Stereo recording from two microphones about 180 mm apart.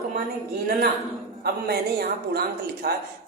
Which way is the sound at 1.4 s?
60° right (ahead or behind).